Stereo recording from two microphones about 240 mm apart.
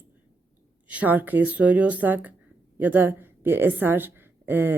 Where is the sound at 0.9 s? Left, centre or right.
Centre.